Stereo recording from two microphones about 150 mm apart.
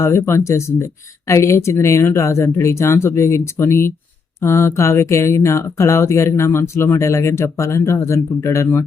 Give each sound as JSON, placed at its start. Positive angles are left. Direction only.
{"t": 0.0, "sound": "speech", "side_deg": 20}